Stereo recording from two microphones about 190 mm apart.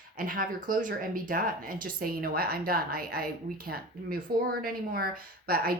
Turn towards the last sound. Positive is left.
turn(degrees=-50)  # may be behind; listen again after turning